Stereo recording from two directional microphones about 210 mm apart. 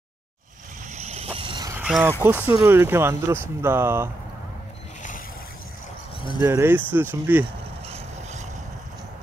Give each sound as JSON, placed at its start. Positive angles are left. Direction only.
{"t": 0.9, "sound": "a sound", "side_deg": -30}
{"t": 1.8, "sound": "speech", "side_deg": -5}
{"t": 6.4, "sound": "speech", "side_deg": -10}
{"t": 7.9, "sound": "vehicle", "side_deg": -30}